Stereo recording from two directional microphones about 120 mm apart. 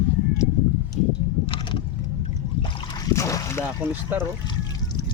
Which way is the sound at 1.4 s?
45° left (ahead or behind).